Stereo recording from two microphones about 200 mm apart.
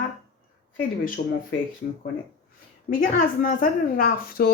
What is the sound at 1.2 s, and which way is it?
Speech, 45° left (ahead or behind).